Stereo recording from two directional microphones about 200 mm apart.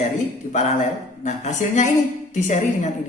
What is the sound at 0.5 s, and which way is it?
Speech, 35° left (ahead or behind).